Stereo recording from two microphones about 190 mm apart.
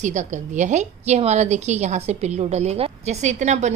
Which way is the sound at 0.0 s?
40° right (ahead or behind).